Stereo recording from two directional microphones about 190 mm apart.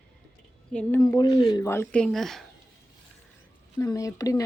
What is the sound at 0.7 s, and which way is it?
Speech, 15° left (ahead or behind).